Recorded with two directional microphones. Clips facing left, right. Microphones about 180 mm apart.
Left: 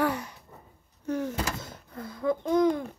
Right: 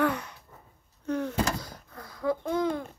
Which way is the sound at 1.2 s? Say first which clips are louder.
Right 3 dB; 25° left (ahead or behind).